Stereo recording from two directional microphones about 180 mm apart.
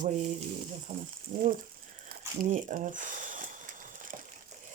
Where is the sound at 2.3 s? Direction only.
45° right (ahead or behind).